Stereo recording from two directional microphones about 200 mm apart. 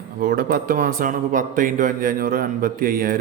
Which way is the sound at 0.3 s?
45° right (ahead or behind).